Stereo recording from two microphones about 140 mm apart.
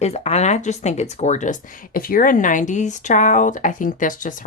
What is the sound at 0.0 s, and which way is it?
Speech, 50° left (ahead or behind).